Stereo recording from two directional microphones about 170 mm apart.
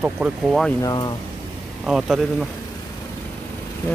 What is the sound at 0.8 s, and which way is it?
Speech, 25° left (ahead or behind).